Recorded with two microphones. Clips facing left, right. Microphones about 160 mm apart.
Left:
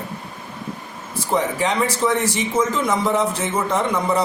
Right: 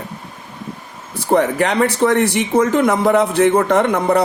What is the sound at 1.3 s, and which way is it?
A man's voice, 65° right (ahead or behind).